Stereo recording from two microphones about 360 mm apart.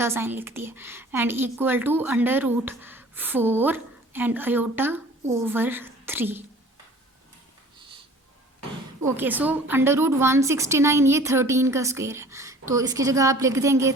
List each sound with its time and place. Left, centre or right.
0.0 s a woman's voice: centre
9.0 s a woman's voice: centre